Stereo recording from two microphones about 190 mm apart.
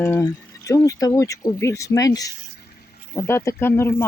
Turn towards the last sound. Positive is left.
turn(degrees=15)  # may be behind; listen again after turning